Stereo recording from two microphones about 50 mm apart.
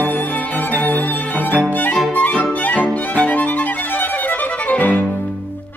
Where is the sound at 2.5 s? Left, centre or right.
Left.